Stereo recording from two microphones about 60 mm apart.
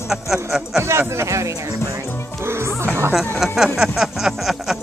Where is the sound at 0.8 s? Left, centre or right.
Right.